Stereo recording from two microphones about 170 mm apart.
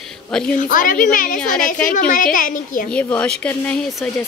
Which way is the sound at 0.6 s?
50° left (ahead or behind).